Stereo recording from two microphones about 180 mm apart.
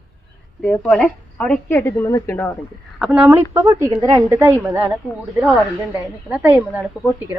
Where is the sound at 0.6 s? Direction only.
Centre (ahead or behind).